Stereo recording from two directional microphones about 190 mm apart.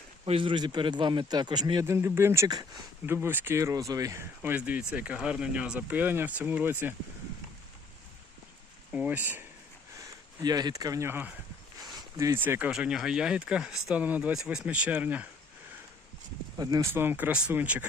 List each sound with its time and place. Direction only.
0.3 s a man's voice: 25° right (ahead or behind); by 6.9 s 10° right (ahead or behind)
8.9 s a man's voice: 10° right (ahead or behind)
10.4 s a man's voice: 20° right (ahead or behind)
16.6 s a man's voice: 20° right (ahead or behind)